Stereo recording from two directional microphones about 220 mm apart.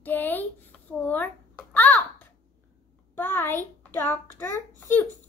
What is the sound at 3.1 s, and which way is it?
A child's voice, 10° left (ahead or behind).